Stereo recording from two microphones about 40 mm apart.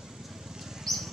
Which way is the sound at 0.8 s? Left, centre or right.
Centre.